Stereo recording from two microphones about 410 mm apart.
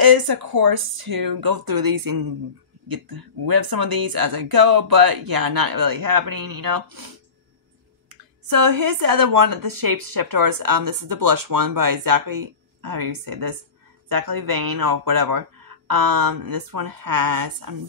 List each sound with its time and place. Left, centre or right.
0.0 s speech: right
8.1 s speech: right